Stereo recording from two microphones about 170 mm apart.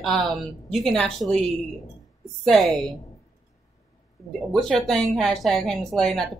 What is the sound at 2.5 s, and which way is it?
Speech, centre (ahead or behind).